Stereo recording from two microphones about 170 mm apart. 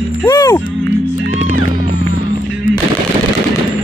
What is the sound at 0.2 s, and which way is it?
Speech, 15° left (ahead or behind).